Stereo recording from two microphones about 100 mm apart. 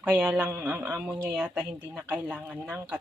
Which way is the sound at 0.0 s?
10° right (ahead or behind).